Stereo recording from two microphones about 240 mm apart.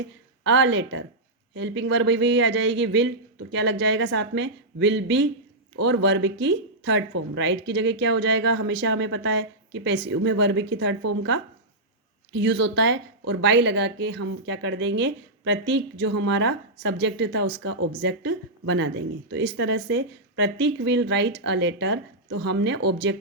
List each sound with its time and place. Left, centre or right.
0.4 s a woman's voice: right
12.3 s a woman's voice: right